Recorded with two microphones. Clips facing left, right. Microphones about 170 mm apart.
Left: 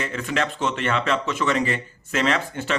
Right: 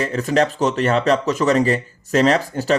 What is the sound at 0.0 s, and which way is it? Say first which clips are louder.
Speech: right 7 dB; 35° right (ahead or behind).